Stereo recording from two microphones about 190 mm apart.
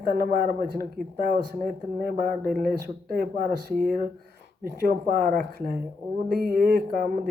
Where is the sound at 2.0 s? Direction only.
50° right (ahead or behind).